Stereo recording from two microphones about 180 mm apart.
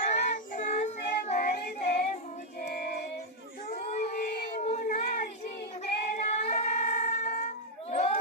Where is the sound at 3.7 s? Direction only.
40° left (ahead or behind).